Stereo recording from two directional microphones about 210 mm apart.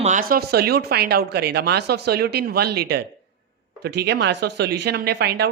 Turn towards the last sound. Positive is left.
turn(degrees=-50)  # may be behind; listen again after turning